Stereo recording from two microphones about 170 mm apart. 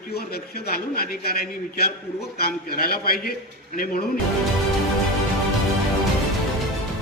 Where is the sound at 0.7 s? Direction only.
60° left (ahead or behind).